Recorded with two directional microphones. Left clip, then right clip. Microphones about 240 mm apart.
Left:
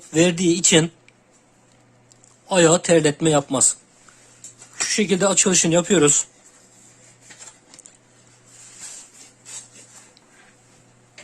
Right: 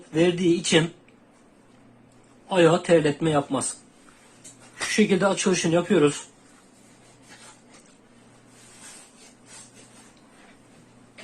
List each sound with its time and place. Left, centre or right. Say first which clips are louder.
0.1 s speech: left 3 dB; left
2.5 s speech: left 3 dB; left
4.9 s speech: left 2 dB; left